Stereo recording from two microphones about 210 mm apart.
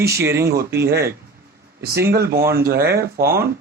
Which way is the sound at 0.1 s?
15° right (ahead or behind).